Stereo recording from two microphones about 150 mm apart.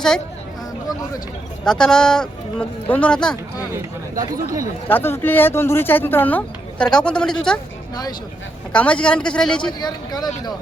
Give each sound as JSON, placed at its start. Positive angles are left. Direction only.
{"t": 1.6, "sound": "speech", "side_deg": 5}
{"t": 4.1, "sound": "speech", "side_deg": -65}
{"t": 4.9, "sound": "speech", "side_deg": 15}
{"t": 8.7, "sound": "speech", "side_deg": 10}
{"t": 9.8, "sound": "speech", "side_deg": 25}